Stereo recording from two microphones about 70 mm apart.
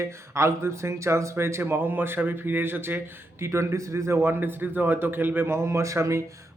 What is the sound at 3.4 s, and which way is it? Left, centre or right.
A man's voice, right.